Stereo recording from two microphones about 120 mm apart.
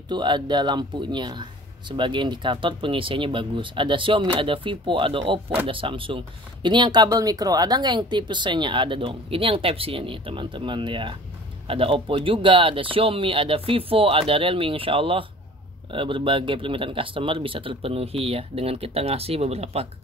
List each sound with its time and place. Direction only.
0.1 s speech: 40° right (ahead or behind); by 19.9 s 60° right (ahead or behind)